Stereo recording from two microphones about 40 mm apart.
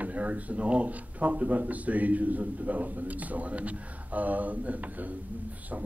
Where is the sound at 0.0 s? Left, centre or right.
Right.